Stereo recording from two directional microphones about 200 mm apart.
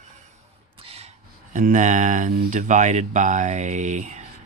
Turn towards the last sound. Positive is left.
turn(degrees=-35)  # may be behind; listen again after turning